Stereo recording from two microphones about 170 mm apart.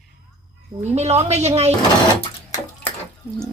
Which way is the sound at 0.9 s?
40° right (ahead or behind).